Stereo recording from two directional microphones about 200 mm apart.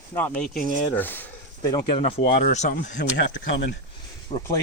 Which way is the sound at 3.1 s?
65° left (ahead or behind).